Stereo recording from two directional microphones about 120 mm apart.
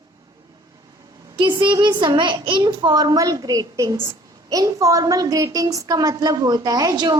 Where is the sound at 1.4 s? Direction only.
40° right (ahead or behind).